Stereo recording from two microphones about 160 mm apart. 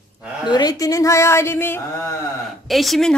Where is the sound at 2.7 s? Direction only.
Centre (ahead or behind).